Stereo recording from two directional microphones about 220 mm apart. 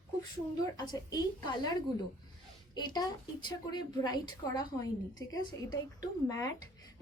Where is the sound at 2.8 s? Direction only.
20° left (ahead or behind).